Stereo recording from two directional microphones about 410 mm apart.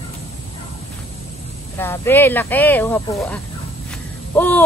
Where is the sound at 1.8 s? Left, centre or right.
Centre.